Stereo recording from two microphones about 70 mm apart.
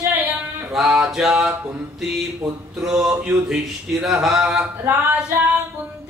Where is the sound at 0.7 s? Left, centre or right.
Centre.